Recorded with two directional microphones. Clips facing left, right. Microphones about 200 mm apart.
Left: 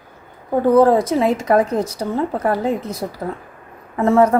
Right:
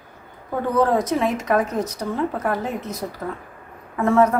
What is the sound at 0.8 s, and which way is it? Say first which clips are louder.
Speech: left 5 dB; 30° left (ahead or behind).